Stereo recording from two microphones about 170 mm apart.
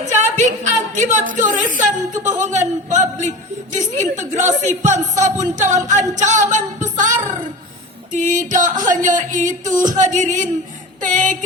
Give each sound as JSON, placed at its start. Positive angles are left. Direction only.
{"t": 0.0, "sound": "a woman's voice", "side_deg": -45}
{"t": 11.0, "sound": "music", "side_deg": -45}